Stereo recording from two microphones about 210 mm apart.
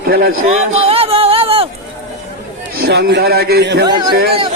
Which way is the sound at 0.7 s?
30° right (ahead or behind).